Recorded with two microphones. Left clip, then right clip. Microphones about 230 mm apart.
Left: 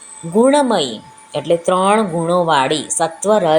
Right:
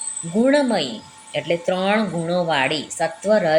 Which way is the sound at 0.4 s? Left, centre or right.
Left.